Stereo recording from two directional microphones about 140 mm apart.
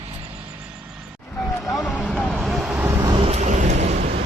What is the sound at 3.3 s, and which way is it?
Vehicle, 55° right (ahead or behind).